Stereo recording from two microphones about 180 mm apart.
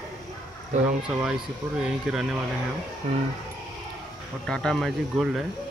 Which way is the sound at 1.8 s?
5° right (ahead or behind).